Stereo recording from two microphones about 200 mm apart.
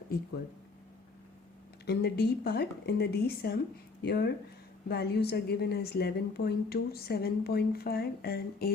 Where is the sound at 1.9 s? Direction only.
55° left (ahead or behind).